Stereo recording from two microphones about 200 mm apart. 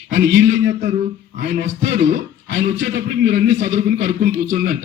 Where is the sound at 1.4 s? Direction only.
60° right (ahead or behind); by 4.3 s 45° right (ahead or behind).